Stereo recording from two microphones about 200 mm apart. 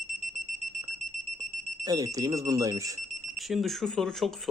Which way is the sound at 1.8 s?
15° right (ahead or behind).